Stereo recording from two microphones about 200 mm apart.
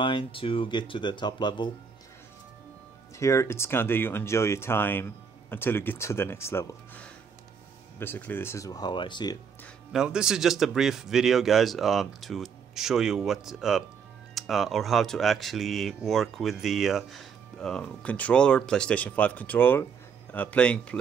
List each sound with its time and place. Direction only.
0.0 s speech: 25° left (ahead or behind)
3.2 s speech: 15° left (ahead or behind)
9.9 s speech: 5° right (ahead or behind)